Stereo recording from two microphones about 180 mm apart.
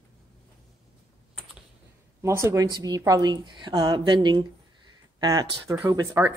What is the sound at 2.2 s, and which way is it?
A woman's voice, 15° right (ahead or behind).